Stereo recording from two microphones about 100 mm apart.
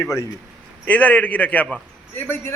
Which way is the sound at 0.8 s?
15° left (ahead or behind).